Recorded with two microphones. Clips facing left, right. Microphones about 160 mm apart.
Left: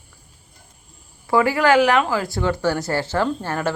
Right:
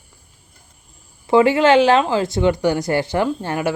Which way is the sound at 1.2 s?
25° right (ahead or behind).